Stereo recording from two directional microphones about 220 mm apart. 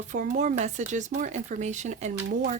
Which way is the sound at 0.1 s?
35° right (ahead or behind).